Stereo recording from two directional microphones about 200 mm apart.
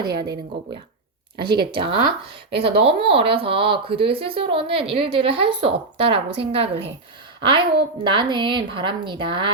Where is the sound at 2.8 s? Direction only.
30° right (ahead or behind).